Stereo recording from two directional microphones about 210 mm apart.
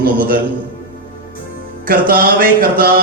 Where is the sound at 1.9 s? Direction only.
45° right (ahead or behind).